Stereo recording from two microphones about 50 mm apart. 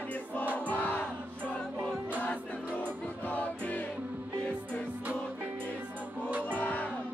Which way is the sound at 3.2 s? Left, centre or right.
Left.